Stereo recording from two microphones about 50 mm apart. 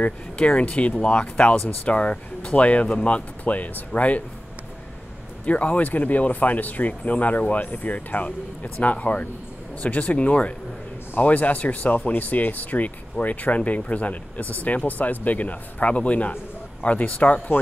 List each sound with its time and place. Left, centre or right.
0.0 s speech: left
5.4 s speech: left